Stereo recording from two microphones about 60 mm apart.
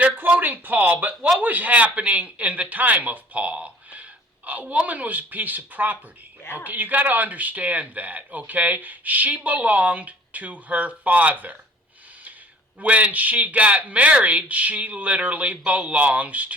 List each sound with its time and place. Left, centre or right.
0.0 s speech: right
6.4 s a woman's voice: left
6.7 s speech: right
12.8 s speech: right